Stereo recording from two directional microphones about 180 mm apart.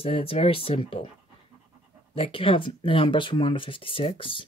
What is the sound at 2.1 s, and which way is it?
Speech, 30° left (ahead or behind).